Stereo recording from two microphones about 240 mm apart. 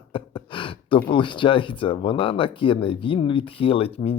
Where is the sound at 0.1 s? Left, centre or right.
Left.